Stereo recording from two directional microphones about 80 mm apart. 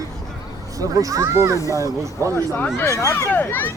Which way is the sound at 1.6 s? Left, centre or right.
Left.